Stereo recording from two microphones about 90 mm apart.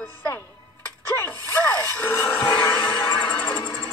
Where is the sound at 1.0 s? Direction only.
25° left (ahead or behind).